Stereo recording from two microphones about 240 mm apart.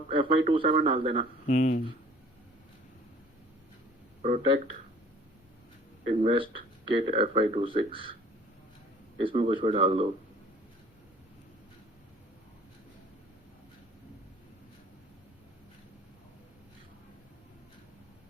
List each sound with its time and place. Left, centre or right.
0.1 s speech: right
1.5 s speech: left
4.2 s speech: right
6.2 s speech: right
9.2 s speech: right